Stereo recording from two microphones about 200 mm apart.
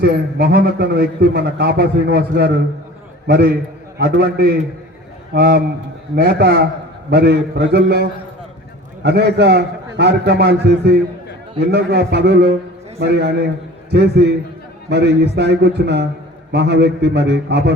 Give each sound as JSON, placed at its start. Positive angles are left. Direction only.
{"t": 0.0, "sound": "a man's voice", "side_deg": -50}
{"t": 9.0, "sound": "a man's voice", "side_deg": -55}